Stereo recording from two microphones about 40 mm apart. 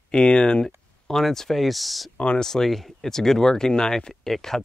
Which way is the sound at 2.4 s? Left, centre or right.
Centre.